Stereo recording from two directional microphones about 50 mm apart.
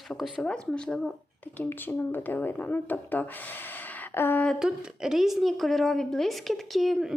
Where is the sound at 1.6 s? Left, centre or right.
Left.